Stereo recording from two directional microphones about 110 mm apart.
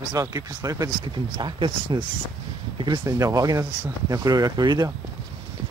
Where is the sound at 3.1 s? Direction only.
30° right (ahead or behind).